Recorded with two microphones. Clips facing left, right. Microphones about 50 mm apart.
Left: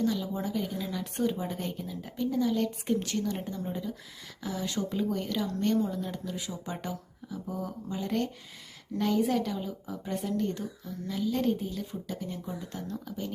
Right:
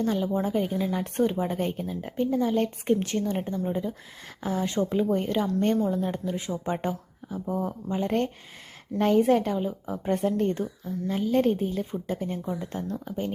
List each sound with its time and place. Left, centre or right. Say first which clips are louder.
0.0 s a woman's voice: right 4 dB; right
5.7 s speech: right 3 dB; right
6.0 s a woman's voice: right 6 dB; right